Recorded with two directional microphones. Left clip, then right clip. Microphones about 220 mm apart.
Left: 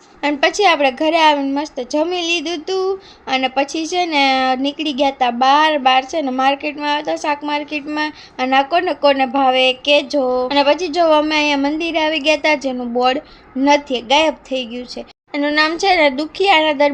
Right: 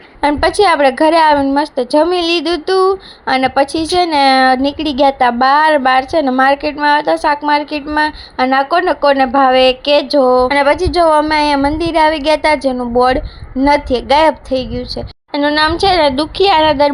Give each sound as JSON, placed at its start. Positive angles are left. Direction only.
{"t": 0.2, "sound": "a woman's voice", "side_deg": -20}